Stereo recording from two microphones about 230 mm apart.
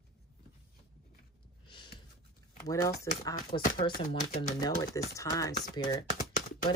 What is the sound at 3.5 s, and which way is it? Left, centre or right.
Speech, left.